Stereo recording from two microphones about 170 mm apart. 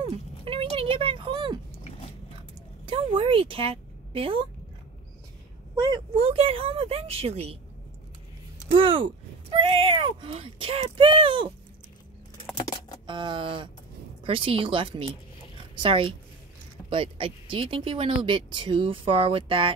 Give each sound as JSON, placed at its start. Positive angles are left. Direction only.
{"t": 0.0, "sound": "a sound", "side_deg": -30}
{"t": 2.8, "sound": "a woman's voice", "side_deg": -30}
{"t": 5.8, "sound": "speech", "side_deg": -25}
{"t": 8.6, "sound": "speech", "side_deg": -30}
{"t": 12.5, "sound": "typing", "side_deg": 25}
{"t": 13.0, "sound": "a woman's voice", "side_deg": -30}